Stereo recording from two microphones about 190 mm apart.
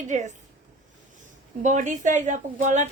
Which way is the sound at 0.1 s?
40° right (ahead or behind).